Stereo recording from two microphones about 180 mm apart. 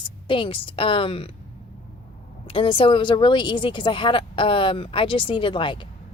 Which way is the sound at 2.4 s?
30° left (ahead or behind).